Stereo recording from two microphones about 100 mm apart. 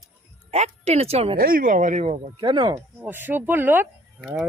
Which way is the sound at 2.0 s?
60° right (ahead or behind).